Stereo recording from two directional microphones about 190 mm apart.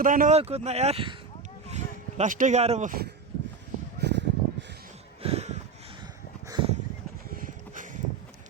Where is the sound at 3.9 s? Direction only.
60° right (ahead or behind).